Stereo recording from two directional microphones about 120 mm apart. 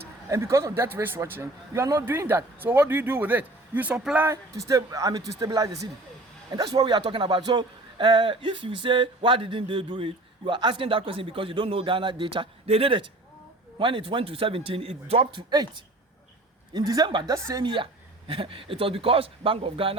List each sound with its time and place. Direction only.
0.3 s a man's voice: 25° right (ahead or behind)
4.3 s a man's voice: 25° right (ahead or behind); by 20.0 s 50° right (ahead or behind)